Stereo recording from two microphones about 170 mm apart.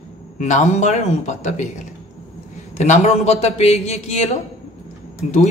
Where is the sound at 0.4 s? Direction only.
45° left (ahead or behind).